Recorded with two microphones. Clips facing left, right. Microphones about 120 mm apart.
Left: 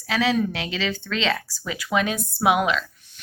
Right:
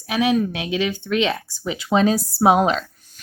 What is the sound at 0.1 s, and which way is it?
Speech, 15° right (ahead or behind).